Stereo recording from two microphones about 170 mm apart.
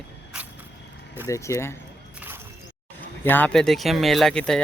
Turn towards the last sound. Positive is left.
turn(degrees=5)  # may be behind; listen again after turning